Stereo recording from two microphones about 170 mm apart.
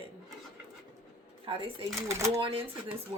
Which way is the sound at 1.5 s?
30° right (ahead or behind).